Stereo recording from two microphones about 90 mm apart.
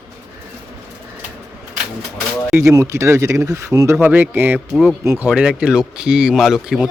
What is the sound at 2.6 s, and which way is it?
Speech, 35° right (ahead or behind).